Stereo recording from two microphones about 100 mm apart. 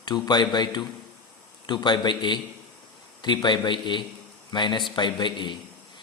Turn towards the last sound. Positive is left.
turn(degrees=50)  # may be behind; listen again after turning